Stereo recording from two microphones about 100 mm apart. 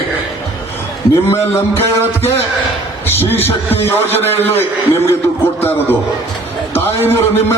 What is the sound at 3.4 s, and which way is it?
Speech, 25° left (ahead or behind).